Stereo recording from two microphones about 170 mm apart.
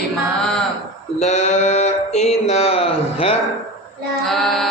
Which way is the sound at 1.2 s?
40° left (ahead or behind).